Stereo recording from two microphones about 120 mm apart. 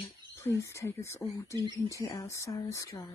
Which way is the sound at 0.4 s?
25° left (ahead or behind).